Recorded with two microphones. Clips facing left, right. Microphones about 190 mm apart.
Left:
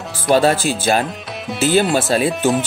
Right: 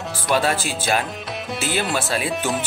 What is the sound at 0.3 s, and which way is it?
Speech, 40° left (ahead or behind).